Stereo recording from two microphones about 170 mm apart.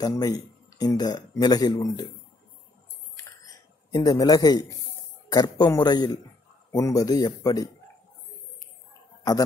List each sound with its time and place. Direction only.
0.0 s speech: 20° left (ahead or behind)
3.2 s a sound: 20° left (ahead or behind)
5.3 s speech: 20° left (ahead or behind)